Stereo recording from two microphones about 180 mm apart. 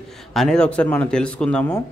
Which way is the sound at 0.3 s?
Centre (ahead or behind).